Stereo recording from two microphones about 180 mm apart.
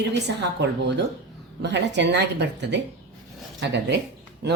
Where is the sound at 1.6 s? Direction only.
75° right (ahead or behind).